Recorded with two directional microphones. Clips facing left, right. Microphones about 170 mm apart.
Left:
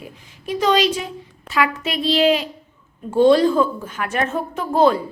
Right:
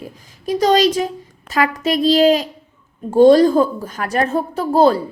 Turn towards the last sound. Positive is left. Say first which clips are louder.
# right 3 dB
turn(degrees=-35)  # may be behind; listen again after turning